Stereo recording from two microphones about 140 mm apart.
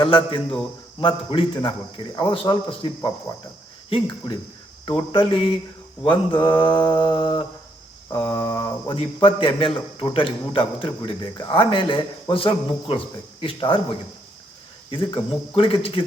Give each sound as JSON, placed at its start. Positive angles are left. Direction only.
{"t": 0.0, "sound": "a man's voice", "side_deg": 40}
{"t": 14.8, "sound": "a man's voice", "side_deg": 40}